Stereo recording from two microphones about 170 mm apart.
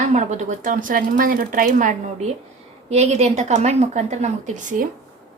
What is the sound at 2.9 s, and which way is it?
Speech, 40° right (ahead or behind).